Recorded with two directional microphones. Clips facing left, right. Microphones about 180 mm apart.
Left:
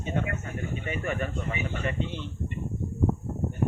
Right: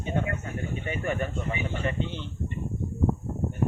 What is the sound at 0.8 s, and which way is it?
Speech, 35° right (ahead or behind).